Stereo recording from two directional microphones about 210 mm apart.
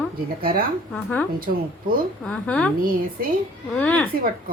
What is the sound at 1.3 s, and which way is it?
Speech, 45° right (ahead or behind).